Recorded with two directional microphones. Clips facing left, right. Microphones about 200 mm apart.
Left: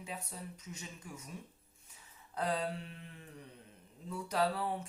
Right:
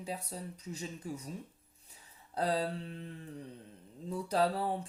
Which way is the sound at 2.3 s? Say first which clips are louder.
Right 3 dB; 35° right (ahead or behind).